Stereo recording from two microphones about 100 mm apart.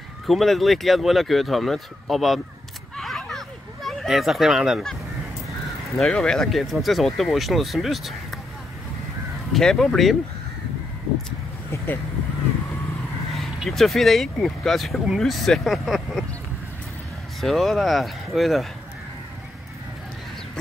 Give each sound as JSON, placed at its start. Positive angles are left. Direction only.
{"t": 0.3, "sound": "speech", "side_deg": 0}
{"t": 3.0, "sound": "a sound", "side_deg": 0}
{"t": 5.9, "sound": "speech", "side_deg": 10}
{"t": 9.5, "sound": "speech", "side_deg": 5}
{"t": 11.7, "sound": "vehicle", "side_deg": 25}
{"t": 13.3, "sound": "speech", "side_deg": 0}
{"t": 17.4, "sound": "speech", "side_deg": 0}